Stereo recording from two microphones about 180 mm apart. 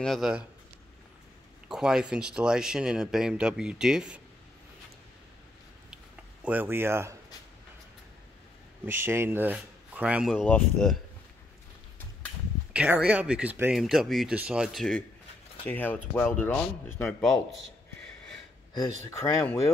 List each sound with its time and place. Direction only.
0.0 s speech: centre (ahead or behind)
1.7 s speech: 5° right (ahead or behind)
6.4 s speech: 10° right (ahead or behind)
8.8 s speech: 10° right (ahead or behind)
10.4 s speech: 5° left (ahead or behind)
12.7 s speech: 5° right (ahead or behind); by 17.3 s 10° left (ahead or behind)
19.0 s speech: 15° left (ahead or behind)